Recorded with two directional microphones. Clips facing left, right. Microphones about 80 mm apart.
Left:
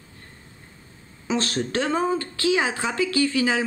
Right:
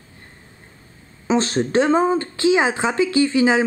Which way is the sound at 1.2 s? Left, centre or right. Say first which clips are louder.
Right 6 dB; right.